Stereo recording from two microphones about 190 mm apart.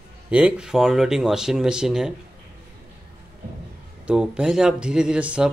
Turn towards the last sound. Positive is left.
turn(degrees=-5)  # may be behind; listen again after turning